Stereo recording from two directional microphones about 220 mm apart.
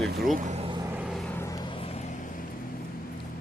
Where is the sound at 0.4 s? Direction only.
30° right (ahead or behind).